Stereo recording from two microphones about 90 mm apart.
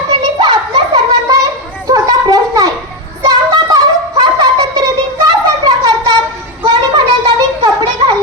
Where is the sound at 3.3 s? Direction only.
50° right (ahead or behind).